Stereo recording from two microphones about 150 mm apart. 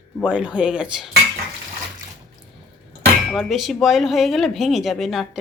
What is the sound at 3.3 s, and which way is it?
Speech, centre (ahead or behind).